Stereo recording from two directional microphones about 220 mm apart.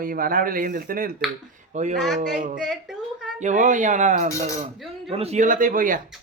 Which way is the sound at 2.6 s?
Centre (ahead or behind).